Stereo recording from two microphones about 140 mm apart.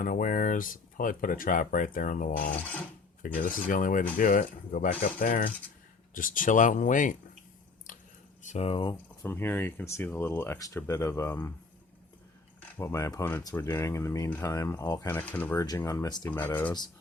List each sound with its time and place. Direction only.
0.0 s speech: 75° left (ahead or behind)
3.3 s speech: 80° left
4.2 s speech: 90° left
6.1 s speech: 75° left (ahead or behind)
7.9 s a sound: 75° left (ahead or behind)
8.4 s speech: 50° left (ahead or behind)
9.2 s speech: 15° left (ahead or behind)
12.7 s speech: 20° left (ahead or behind)
15.5 s speech: 25° left (ahead or behind)
16.3 s speech: 15° left (ahead or behind)